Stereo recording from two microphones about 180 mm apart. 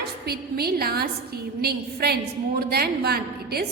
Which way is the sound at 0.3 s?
60° right (ahead or behind).